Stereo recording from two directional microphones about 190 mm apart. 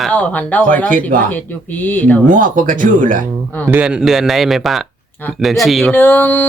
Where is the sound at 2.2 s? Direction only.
45° right (ahead or behind).